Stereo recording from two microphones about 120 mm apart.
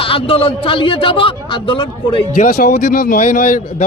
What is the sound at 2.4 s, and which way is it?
Speech, 90° left.